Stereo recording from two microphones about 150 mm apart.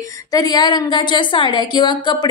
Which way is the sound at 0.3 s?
25° left (ahead or behind).